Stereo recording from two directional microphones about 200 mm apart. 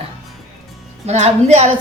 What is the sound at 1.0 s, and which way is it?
Speech, 35° right (ahead or behind).